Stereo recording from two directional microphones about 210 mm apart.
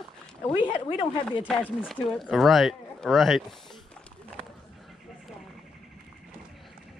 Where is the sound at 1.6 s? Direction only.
10° left (ahead or behind).